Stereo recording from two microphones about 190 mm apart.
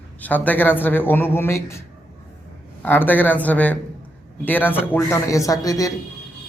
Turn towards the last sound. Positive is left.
turn(degrees=20)  # may be behind; listen again after turning